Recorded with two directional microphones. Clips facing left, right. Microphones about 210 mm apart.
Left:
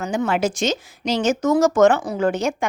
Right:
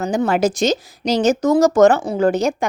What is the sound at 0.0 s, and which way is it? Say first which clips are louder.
Speech: right 4 dB; 35° right (ahead or behind).